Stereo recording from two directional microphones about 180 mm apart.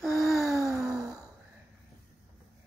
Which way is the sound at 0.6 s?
15° right (ahead or behind).